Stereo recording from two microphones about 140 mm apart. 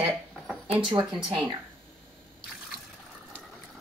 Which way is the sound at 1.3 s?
40° right (ahead or behind).